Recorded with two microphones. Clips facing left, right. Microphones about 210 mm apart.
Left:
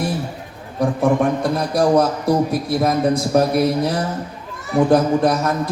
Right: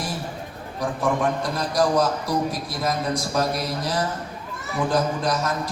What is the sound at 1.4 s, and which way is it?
A man's voice, 55° left (ahead or behind).